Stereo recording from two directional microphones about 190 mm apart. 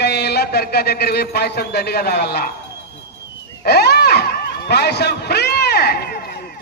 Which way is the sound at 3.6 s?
60° left (ahead or behind).